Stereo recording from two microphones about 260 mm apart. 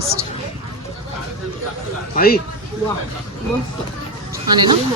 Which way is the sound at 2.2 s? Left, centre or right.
Left.